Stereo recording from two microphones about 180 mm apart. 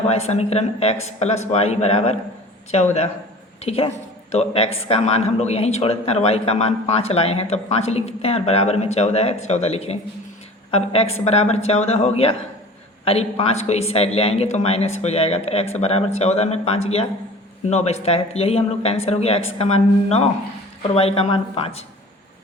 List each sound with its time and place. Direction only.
0.1 s a man's voice: 35° left (ahead or behind)